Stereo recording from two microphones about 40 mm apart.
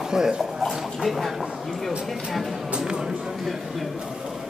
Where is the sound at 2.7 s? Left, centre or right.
Centre.